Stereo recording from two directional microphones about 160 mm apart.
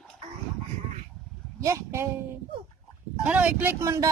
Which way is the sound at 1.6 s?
15° right (ahead or behind).